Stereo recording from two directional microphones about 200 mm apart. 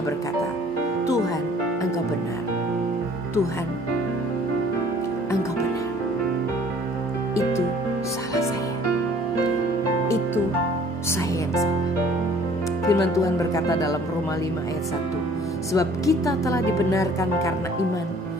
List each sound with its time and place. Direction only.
12.8 s speech: 15° left (ahead or behind)
15.7 s speech: 15° left (ahead or behind)